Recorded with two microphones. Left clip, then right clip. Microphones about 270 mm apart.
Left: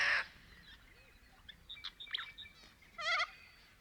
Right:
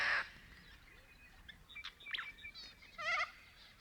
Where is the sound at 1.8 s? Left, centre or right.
Left.